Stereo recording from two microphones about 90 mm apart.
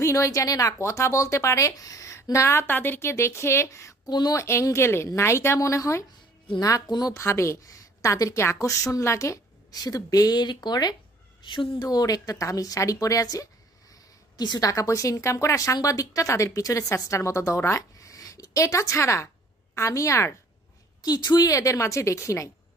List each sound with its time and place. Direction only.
0.0 s a woman's voice: 35° left (ahead or behind)
4.1 s a woman's voice: 45° left (ahead or behind)
4.4 s a woman's voice: 30° left (ahead or behind); by 10.9 s 50° left (ahead or behind)
11.4 s a woman's voice: 60° left (ahead or behind)
11.9 s a woman's voice: 45° left (ahead or behind)
14.7 s a woman's voice: 35° left (ahead or behind)
21.0 s a woman's voice: 45° left (ahead or behind)